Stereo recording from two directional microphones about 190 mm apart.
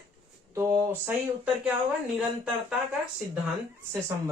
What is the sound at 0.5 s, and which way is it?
Speech, 10° right (ahead or behind).